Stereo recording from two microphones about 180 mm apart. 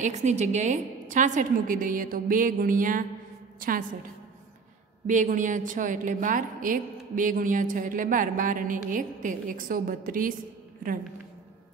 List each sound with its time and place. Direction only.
0.0 s a woman's voice: 40° right (ahead or behind)
5.0 s a woman's voice: 45° right (ahead or behind)